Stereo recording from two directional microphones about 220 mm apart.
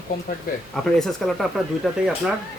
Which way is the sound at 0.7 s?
Centre (ahead or behind).